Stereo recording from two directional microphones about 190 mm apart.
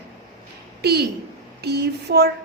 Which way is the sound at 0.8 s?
60° right (ahead or behind).